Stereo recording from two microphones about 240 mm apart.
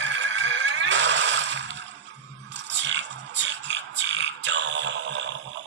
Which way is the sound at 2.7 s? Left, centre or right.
Right.